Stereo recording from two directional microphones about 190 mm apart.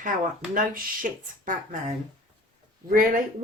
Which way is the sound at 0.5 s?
45° right (ahead or behind).